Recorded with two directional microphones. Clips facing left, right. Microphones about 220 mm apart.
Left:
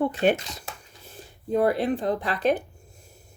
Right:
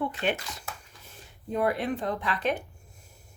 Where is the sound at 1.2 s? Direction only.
35° left (ahead or behind).